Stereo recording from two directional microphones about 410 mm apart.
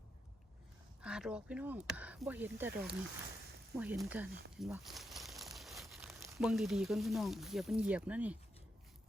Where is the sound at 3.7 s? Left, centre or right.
Centre.